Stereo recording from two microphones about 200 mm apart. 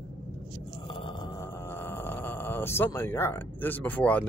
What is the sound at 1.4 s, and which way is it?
Speech, 10° left (ahead or behind).